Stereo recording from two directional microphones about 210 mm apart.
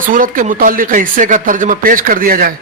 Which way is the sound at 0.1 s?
40° right (ahead or behind).